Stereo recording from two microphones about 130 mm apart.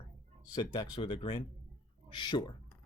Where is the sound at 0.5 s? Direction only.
35° left (ahead or behind).